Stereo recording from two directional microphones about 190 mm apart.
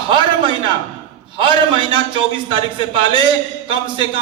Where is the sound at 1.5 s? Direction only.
25° left (ahead or behind).